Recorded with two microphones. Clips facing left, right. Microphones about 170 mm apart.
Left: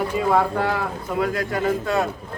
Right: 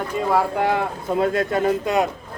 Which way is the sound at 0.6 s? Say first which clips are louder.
Right 3 dB; 25° right (ahead or behind).